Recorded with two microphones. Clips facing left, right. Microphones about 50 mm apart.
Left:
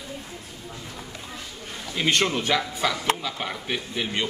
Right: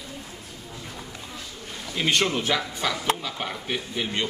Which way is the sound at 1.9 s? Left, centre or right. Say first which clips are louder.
Even; centre.